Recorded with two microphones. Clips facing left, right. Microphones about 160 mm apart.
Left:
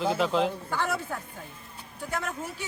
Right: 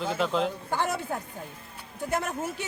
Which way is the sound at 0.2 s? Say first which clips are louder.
Left 1 dB; centre (ahead or behind).